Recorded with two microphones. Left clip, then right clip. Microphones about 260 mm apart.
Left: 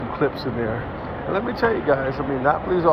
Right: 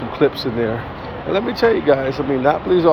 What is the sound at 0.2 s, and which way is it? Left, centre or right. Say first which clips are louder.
Speech: right 7 dB; right.